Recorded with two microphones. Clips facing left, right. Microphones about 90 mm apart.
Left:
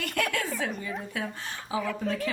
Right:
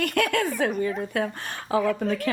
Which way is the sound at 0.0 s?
60° right (ahead or behind).